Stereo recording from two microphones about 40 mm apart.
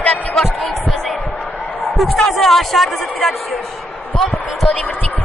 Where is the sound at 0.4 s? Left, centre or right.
Centre.